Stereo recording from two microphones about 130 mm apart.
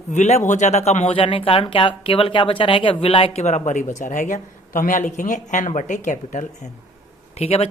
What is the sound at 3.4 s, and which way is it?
Speech, 65° left (ahead or behind).